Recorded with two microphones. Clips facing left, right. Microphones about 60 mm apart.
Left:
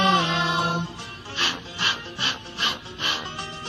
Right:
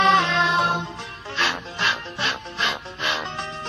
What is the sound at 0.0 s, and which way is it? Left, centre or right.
Music, right.